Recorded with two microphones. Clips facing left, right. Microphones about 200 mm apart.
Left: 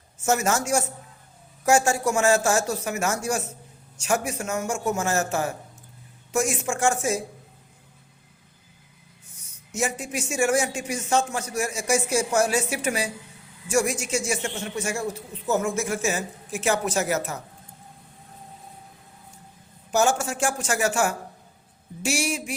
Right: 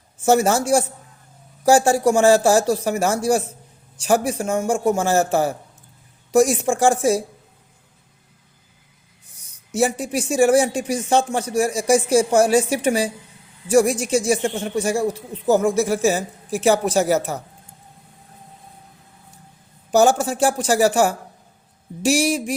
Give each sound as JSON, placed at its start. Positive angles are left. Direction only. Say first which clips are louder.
{"t": 0.3, "sound": "a man's voice", "louder": "right 7 dB", "side_deg": -35}
{"t": 9.7, "sound": "a man's voice", "louder": "right 8 dB", "side_deg": -35}
{"t": 19.9, "sound": "a man's voice", "louder": "right 6 dB", "side_deg": -35}